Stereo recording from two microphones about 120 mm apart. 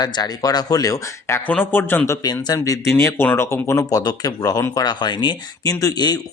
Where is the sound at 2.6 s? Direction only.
20° left (ahead or behind).